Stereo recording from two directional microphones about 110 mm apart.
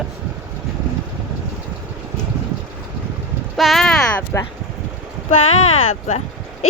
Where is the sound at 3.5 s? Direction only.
Centre (ahead or behind).